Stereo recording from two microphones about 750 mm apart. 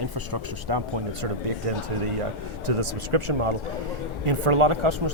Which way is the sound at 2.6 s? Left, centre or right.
Right.